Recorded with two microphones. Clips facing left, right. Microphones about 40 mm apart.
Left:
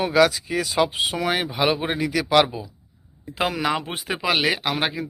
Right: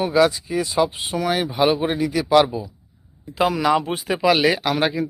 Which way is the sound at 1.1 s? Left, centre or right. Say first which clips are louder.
Right 2 dB; left.